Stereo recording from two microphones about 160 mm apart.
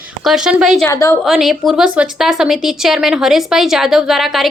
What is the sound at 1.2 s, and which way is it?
Speech, centre (ahead or behind).